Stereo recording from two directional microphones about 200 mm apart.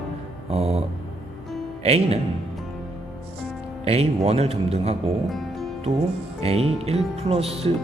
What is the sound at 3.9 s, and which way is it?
Speech, 30° right (ahead or behind).